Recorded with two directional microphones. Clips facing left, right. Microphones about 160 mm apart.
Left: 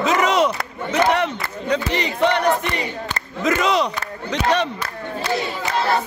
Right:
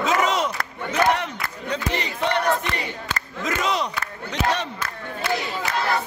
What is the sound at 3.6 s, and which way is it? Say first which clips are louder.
Battle cry: left 4 dB; 85° left.